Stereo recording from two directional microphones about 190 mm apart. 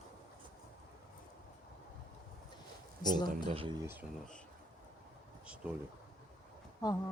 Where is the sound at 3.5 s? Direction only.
30° right (ahead or behind).